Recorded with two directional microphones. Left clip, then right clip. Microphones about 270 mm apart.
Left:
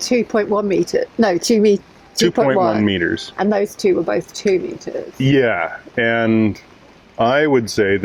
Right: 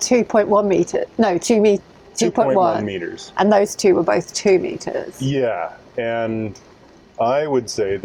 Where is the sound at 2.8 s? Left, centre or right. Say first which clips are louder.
Left 8 dB; left.